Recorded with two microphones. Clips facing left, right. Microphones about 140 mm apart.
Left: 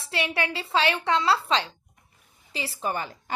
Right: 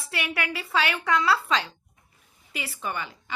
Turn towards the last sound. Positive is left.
turn(degrees=40)  # may be behind; listen again after turning